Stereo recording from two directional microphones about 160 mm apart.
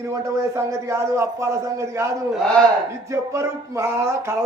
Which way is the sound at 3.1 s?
20° right (ahead or behind).